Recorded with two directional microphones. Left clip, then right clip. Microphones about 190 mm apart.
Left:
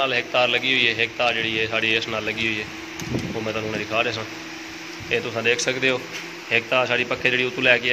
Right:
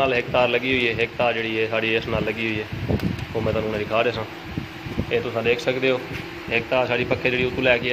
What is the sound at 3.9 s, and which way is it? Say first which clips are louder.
Speech: right 2 dB; 15° right (ahead or behind).